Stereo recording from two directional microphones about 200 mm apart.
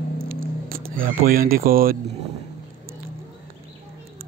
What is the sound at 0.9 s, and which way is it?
Speech, 45° right (ahead or behind).